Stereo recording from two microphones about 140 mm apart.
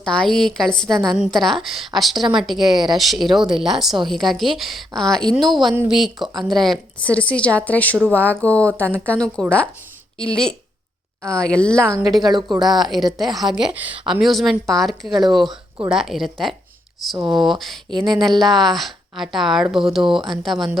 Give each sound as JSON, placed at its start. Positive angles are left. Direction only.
{"t": 0.0, "sound": "a woman's voice", "side_deg": 5}
{"t": 12.2, "sound": "speech", "side_deg": -30}
{"t": 12.9, "sound": "a woman's voice", "side_deg": 0}
{"t": 13.7, "sound": "speech", "side_deg": -35}
{"t": 14.2, "sound": "a woman's voice", "side_deg": 0}